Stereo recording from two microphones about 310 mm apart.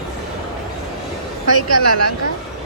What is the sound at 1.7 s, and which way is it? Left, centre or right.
Speech, right.